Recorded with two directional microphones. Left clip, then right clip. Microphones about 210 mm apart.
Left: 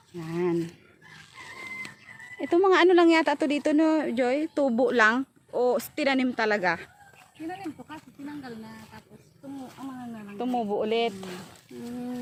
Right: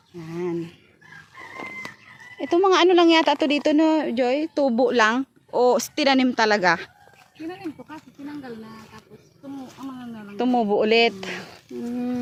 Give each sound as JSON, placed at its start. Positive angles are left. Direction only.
{"t": 0.2, "sound": "a sound", "side_deg": 5}
{"t": 2.4, "sound": "speech", "side_deg": 0}
{"t": 5.5, "sound": "speech", "side_deg": -25}
{"t": 7.4, "sound": "speech", "side_deg": 0}
{"t": 10.2, "sound": "a woman's voice", "side_deg": -40}